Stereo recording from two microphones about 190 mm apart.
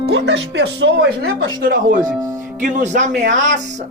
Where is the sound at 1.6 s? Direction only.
45° right (ahead or behind).